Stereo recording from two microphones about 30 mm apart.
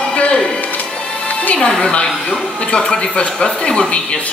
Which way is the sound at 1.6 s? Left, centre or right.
Left.